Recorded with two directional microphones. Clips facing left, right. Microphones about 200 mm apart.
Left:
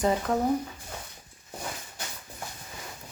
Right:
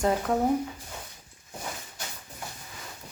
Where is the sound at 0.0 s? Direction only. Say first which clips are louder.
Even; centre (ahead or behind).